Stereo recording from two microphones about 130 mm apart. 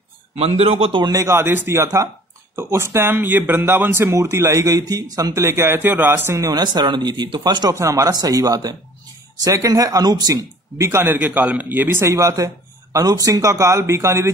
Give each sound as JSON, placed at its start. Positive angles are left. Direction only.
{"t": 0.4, "sound": "a man's voice", "side_deg": -50}
{"t": 1.0, "sound": "a man's voice", "side_deg": -25}
{"t": 6.6, "sound": "a man's voice", "side_deg": -35}